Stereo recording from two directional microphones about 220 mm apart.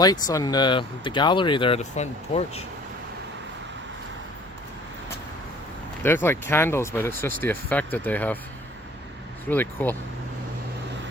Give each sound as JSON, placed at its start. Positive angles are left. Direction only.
{"t": 0.0, "sound": "speech", "side_deg": 15}
{"t": 6.0, "sound": "speech", "side_deg": 10}
{"t": 9.5, "sound": "speech", "side_deg": 10}